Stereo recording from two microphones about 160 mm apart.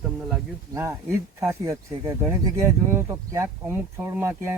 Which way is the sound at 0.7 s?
15° right (ahead or behind).